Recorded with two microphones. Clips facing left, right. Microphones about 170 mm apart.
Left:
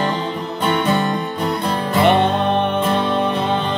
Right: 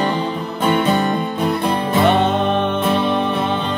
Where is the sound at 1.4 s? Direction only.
20° right (ahead or behind).